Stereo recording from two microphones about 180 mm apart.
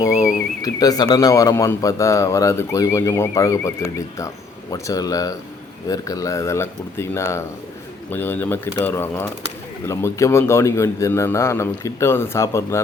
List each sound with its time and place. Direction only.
0.6 s speech: 20° left (ahead or behind)